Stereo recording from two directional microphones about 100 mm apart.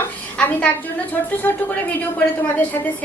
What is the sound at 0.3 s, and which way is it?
A woman's voice, 15° left (ahead or behind).